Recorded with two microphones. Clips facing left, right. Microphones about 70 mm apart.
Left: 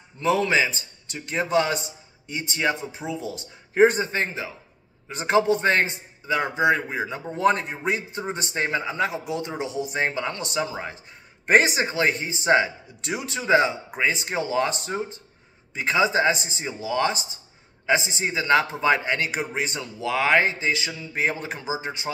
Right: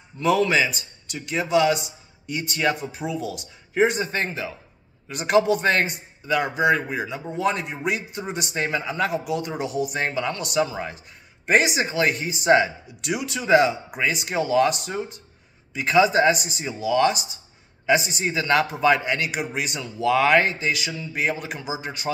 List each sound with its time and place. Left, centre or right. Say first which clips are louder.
0.2 s a man's voice: right 1 dB; left
4.1 s a man's voice: even; left
7.3 s a man's voice: left 3 dB; left
11.4 s a man's voice: left 1 dB; left